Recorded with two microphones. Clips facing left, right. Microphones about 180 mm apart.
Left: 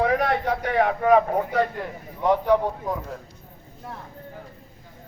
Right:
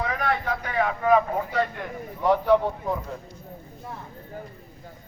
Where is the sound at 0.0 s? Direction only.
65° left (ahead or behind).